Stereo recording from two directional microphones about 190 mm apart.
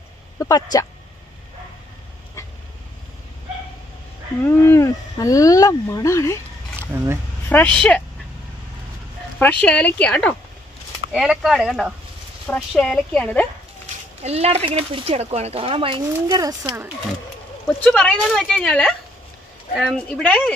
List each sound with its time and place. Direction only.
0.4 s speech: 20° left (ahead or behind)
4.5 s speech: 15° left (ahead or behind)
6.8 s speech: 15° right (ahead or behind)
7.4 s speech: 10° left (ahead or behind)
9.4 s a woman's voice: 5° left (ahead or behind)
14.2 s speech: 35° right (ahead or behind); by 16.9 s 15° right (ahead or behind)
17.8 s a woman's voice: 5° left (ahead or behind)